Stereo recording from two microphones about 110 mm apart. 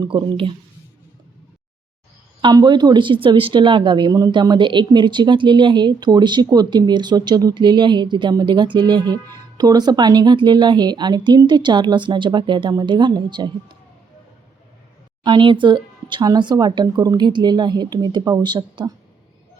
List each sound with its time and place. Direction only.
0.0 s a woman's voice: 50° right (ahead or behind)
2.4 s a woman's voice: 40° right (ahead or behind)
15.2 s speech: 45° right (ahead or behind)